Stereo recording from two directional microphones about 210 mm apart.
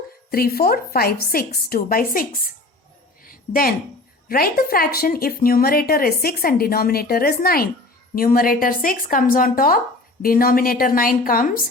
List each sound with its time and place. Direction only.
0.3 s a woman's voice: 45° left (ahead or behind)
3.2 s a sound: 40° left (ahead or behind)
4.3 s a woman's voice: 45° left (ahead or behind)